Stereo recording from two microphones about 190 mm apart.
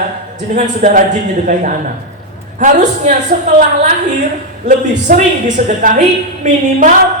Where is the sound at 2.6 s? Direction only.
40° right (ahead or behind).